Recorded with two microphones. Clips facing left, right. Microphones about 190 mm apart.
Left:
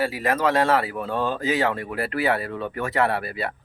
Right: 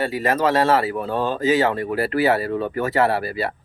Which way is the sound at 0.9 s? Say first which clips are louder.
Right 3 dB; 35° right (ahead or behind).